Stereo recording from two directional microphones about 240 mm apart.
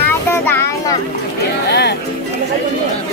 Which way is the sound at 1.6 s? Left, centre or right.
Left.